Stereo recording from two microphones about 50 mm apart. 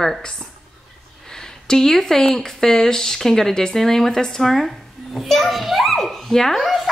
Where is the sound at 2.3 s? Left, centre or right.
Centre.